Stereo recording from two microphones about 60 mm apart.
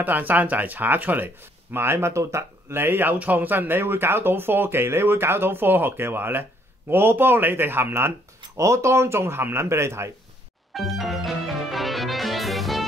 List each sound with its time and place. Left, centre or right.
0.0 s speech: right
8.5 s speech: right
10.7 s music: centre